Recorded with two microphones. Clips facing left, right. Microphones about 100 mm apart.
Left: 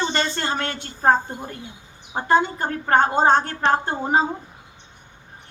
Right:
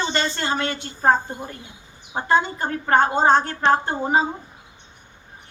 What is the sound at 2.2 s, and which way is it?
A woman's voice, 45° left (ahead or behind).